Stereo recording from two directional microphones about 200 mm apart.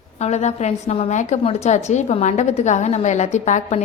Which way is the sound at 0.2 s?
35° left (ahead or behind).